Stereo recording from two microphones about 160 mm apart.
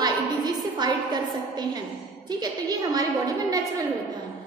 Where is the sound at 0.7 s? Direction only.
25° right (ahead or behind).